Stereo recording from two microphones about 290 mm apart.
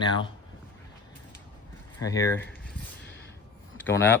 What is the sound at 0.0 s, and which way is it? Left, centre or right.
Speech, centre.